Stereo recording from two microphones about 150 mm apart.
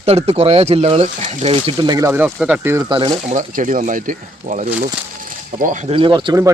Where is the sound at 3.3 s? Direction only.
60° right (ahead or behind).